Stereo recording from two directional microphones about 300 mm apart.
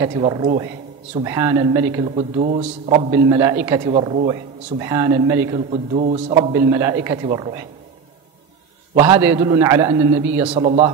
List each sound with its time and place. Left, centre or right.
0.0 s a man's voice: centre
5.5 s a man's voice: right
8.9 s a man's voice: centre